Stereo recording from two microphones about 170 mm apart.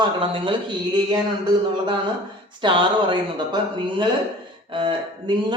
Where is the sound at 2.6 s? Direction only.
30° right (ahead or behind).